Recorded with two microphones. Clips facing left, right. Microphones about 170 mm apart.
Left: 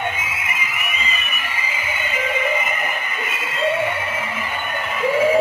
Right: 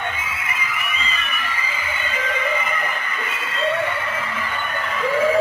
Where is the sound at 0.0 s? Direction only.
15° left (ahead or behind).